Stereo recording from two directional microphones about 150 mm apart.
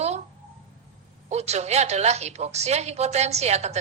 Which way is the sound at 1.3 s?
45° right (ahead or behind).